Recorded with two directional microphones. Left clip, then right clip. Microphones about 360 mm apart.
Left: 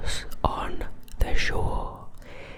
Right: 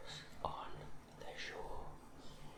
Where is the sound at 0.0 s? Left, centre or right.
Left.